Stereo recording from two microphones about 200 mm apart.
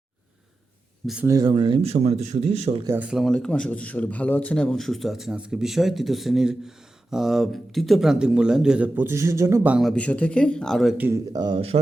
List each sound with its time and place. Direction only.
1.0 s a man's voice: 5° right (ahead or behind)
1.3 s speech: 20° right (ahead or behind)
2.8 s a man's voice: 10° right (ahead or behind); by 11.8 s 25° right (ahead or behind)